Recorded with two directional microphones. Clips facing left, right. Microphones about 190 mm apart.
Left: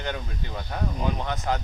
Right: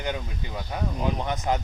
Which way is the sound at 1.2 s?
15° right (ahead or behind).